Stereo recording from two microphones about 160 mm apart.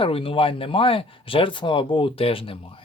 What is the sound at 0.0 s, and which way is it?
Speech, 35° left (ahead or behind).